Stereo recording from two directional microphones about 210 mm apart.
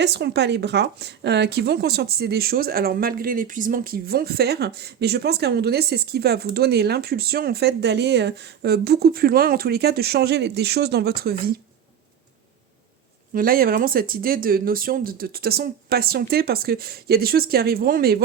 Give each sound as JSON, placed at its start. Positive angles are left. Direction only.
{"t": 0.0, "sound": "speech", "side_deg": -55}
{"t": 13.3, "sound": "speech", "side_deg": -45}